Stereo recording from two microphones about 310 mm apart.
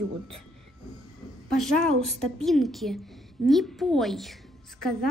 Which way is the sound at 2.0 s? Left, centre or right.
Centre.